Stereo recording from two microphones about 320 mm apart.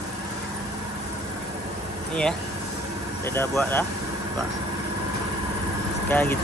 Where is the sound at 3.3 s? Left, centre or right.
Centre.